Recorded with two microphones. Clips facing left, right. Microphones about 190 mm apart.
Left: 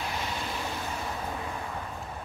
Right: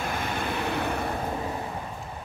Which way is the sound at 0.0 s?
55° right (ahead or behind).